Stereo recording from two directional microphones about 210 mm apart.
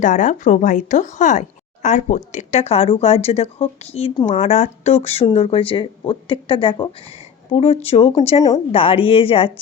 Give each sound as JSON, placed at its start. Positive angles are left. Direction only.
{"t": 0.0, "sound": "a woman's voice", "side_deg": 35}